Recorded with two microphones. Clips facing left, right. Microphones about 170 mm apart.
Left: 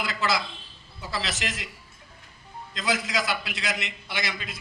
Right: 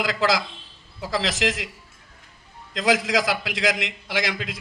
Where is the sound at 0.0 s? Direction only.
90° right.